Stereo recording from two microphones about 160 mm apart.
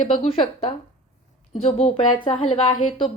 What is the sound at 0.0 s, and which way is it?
A woman's voice, 35° left (ahead or behind).